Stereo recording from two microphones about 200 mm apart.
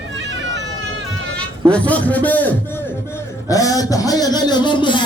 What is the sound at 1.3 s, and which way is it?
A man's voice, 5° left (ahead or behind).